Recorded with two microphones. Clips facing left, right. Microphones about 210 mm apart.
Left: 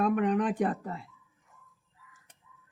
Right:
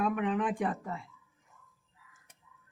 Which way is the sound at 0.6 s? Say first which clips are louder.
Left 4 dB; 40° left (ahead or behind).